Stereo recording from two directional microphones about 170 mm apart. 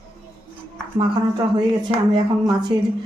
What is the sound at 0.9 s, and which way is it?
Speech, 30° right (ahead or behind).